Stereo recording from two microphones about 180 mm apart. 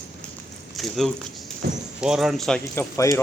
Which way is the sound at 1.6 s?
60° right (ahead or behind).